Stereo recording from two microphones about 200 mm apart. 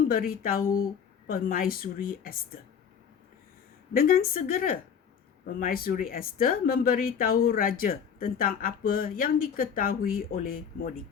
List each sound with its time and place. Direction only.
0.1 s speech: 45° left (ahead or behind)
3.9 s speech: 45° left (ahead or behind)